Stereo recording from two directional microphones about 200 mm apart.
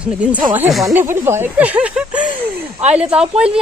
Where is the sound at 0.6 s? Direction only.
Centre (ahead or behind).